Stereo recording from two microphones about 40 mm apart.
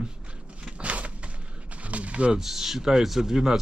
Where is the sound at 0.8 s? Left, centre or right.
Right.